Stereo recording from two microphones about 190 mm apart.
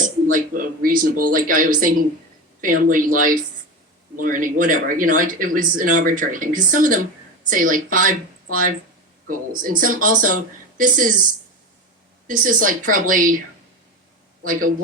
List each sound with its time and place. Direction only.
0.3 s speech: 50° right (ahead or behind)
12.3 s speech: 45° right (ahead or behind)
14.4 s speech: 45° right (ahead or behind)